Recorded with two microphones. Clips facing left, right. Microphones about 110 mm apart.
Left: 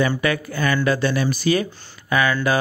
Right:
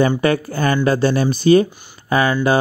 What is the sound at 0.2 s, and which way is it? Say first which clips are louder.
Speech: right 5 dB; 35° right (ahead or behind).